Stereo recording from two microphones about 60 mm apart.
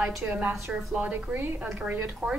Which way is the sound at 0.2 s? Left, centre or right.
Right.